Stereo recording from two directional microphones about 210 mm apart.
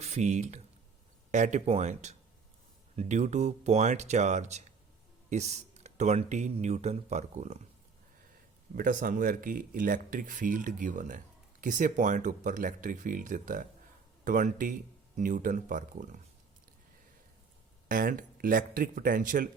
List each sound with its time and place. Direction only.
0.0 s speech: 35° right (ahead or behind)
8.7 s speech: 40° right (ahead or behind)
17.8 s speech: 40° right (ahead or behind)